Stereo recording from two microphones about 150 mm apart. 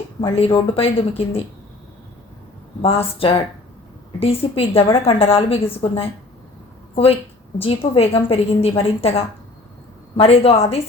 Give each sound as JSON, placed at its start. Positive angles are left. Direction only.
{"t": 0.2, "sound": "a woman's voice", "side_deg": 40}
{"t": 2.8, "sound": "a woman's voice", "side_deg": 40}